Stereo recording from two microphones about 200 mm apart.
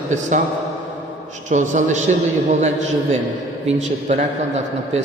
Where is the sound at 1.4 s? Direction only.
40° right (ahead or behind).